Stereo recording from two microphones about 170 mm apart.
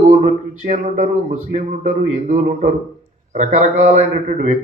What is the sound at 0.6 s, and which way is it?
A man's voice, 50° right (ahead or behind).